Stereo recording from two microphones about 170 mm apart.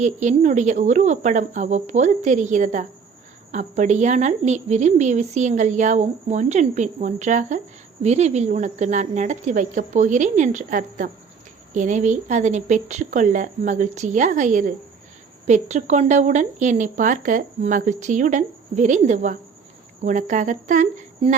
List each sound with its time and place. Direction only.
0.0 s speech: 45° right (ahead or behind)